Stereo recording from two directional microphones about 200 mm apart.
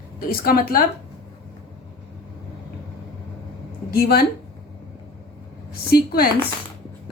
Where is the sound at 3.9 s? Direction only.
50° left (ahead or behind).